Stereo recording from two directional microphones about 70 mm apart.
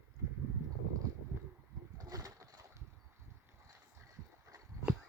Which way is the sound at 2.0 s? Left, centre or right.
Right.